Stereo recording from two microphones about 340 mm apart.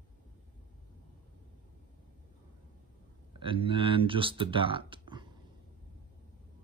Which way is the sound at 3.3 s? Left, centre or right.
Centre.